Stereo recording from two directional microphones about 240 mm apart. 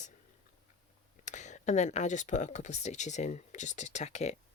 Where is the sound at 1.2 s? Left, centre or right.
Left.